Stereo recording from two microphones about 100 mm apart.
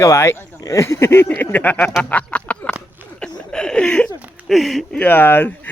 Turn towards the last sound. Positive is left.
turn(degrees=20)  # may be behind; listen again after turning